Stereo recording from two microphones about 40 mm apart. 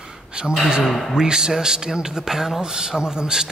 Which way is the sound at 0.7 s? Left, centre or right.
Centre.